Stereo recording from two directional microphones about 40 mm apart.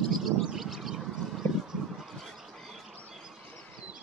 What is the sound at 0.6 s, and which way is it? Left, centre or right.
Vehicle, centre.